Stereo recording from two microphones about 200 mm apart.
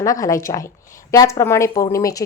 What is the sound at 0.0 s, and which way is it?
A woman's voice, 15° left (ahead or behind).